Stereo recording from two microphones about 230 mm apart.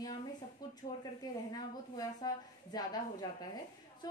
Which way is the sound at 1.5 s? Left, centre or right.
Centre.